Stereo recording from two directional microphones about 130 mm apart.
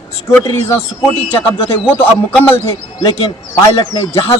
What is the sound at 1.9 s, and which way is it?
Speech, 15° left (ahead or behind).